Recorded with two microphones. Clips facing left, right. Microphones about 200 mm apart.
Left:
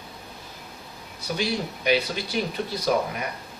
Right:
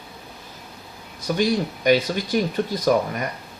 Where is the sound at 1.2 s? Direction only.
45° right (ahead or behind).